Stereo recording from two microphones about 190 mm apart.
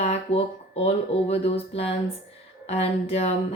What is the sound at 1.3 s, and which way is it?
Speech, 30° left (ahead or behind).